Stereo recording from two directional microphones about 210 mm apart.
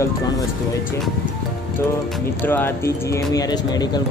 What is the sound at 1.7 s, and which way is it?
Speech, 10° left (ahead or behind).